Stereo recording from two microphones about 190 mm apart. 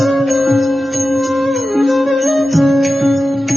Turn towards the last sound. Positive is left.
turn(degrees=0)  # may be behind; listen again after turning